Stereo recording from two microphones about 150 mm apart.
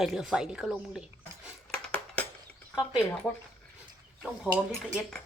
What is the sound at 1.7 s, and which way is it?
Dishes, 10° left (ahead or behind).